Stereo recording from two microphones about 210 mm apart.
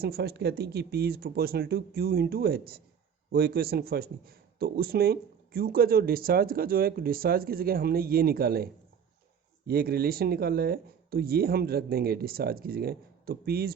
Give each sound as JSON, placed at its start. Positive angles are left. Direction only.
{"t": 0.0, "sound": "speech", "side_deg": -50}